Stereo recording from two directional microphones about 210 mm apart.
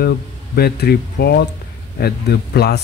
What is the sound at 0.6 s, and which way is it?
Speech, 50° left (ahead or behind).